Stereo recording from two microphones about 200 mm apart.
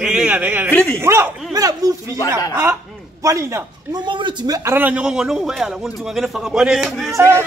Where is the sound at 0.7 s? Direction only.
10° left (ahead or behind).